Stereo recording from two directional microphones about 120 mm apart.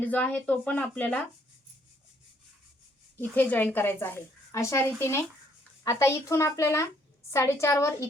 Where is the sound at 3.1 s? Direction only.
15° left (ahead or behind).